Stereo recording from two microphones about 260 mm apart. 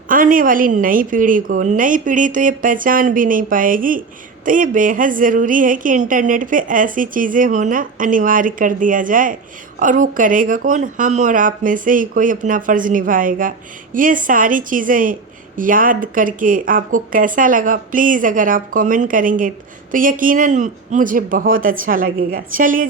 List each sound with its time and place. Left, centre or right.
0.1 s speech: right